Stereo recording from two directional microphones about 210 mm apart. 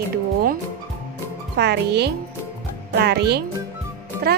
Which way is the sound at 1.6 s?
50° right (ahead or behind).